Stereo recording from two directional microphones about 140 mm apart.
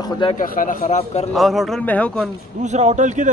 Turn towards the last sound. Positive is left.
turn(degrees=-55)  # may be behind; listen again after turning